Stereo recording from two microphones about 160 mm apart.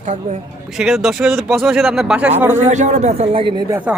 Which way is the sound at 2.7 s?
45° right (ahead or behind).